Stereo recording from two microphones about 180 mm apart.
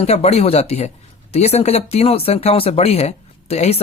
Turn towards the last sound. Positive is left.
turn(degrees=35)  # may be behind; listen again after turning